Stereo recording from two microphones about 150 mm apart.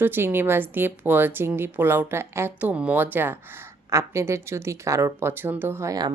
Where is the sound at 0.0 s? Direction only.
15° right (ahead or behind).